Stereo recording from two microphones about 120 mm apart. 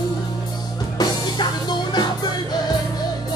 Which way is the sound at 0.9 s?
35° left (ahead or behind).